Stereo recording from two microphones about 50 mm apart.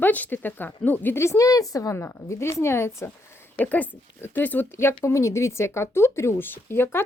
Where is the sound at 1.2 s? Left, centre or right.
Left.